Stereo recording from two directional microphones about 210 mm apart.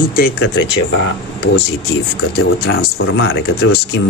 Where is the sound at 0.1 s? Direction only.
55° left (ahead or behind).